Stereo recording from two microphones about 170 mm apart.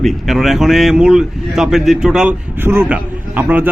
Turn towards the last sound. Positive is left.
turn(degrees=-10)  # may be behind; listen again after turning